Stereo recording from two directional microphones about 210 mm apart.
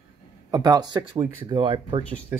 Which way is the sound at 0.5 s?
20° right (ahead or behind).